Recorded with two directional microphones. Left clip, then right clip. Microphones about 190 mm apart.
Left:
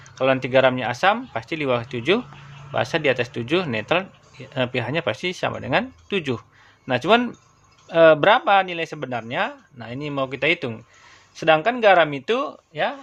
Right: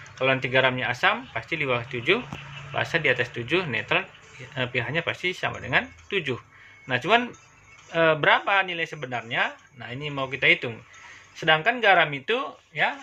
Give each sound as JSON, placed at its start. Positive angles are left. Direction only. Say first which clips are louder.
{"t": 0.0, "sound": "speech", "louder": "left 3 dB", "side_deg": 70}